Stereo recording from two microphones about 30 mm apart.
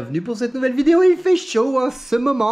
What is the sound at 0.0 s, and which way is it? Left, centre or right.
Speech, centre.